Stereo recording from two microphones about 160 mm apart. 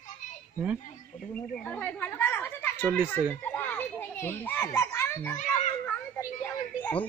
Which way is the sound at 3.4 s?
10° left (ahead or behind).